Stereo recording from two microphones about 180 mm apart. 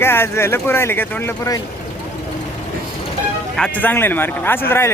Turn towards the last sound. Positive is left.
turn(degrees=15)  # may be behind; listen again after turning